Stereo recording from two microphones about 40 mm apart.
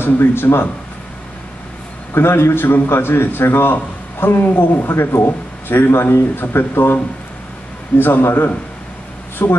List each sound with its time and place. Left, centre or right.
0.0 s speech: left
2.1 s speech: left
8.0 s speech: left